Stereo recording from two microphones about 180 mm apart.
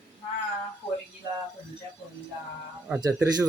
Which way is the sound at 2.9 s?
20° right (ahead or behind).